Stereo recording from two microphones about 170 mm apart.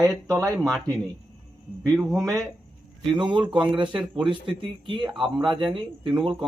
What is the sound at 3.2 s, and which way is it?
Speech, 30° right (ahead or behind).